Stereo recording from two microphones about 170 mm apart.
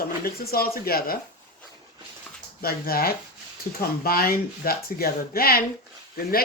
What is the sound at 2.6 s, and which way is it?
Speech, 60° left (ahead or behind).